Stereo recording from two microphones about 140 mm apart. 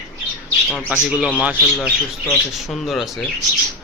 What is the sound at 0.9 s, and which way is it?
Speech, 10° right (ahead or behind).